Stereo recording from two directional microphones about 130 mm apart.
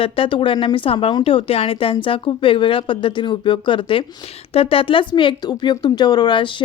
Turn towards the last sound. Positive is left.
turn(degrees=40)  # may be behind; listen again after turning